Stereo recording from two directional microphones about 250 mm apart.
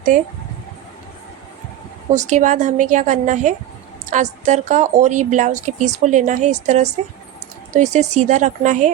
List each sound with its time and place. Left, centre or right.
0.1 s speech: right
2.1 s a woman's voice: right